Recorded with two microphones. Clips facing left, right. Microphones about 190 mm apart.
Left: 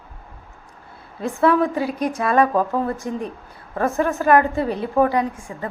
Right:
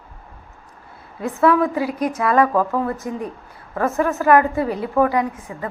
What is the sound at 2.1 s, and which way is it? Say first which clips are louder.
A woman's voice: right 1 dB; 30° left (ahead or behind).